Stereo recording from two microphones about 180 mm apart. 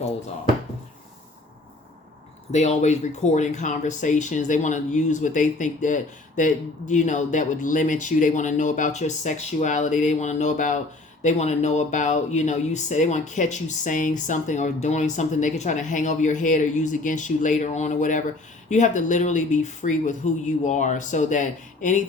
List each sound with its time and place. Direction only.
2.5 s speech: 40° left (ahead or behind)